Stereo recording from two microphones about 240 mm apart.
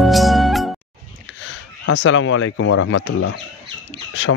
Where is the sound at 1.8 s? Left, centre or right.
Left.